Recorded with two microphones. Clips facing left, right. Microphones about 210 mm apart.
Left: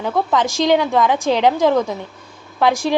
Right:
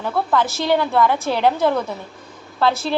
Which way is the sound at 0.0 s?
15° left (ahead or behind).